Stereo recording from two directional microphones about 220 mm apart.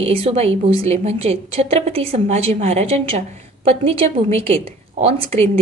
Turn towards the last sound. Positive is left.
turn(degrees=-30)  # may be behind; listen again after turning